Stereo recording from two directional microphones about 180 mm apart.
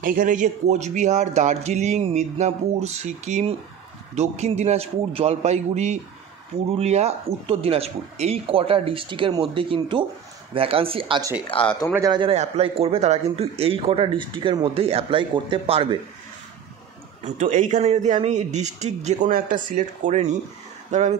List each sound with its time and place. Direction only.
0.0 s a man's voice: 50° right (ahead or behind); by 16.0 s 30° right (ahead or behind)
17.2 s a man's voice: 45° right (ahead or behind)